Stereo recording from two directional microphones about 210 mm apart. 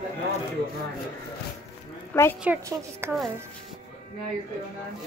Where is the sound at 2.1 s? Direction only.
10° left (ahead or behind).